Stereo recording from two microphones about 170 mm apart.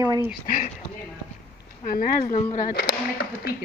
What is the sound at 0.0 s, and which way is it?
Speech, 20° right (ahead or behind).